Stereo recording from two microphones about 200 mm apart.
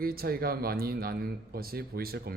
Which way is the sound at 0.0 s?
50° right (ahead or behind).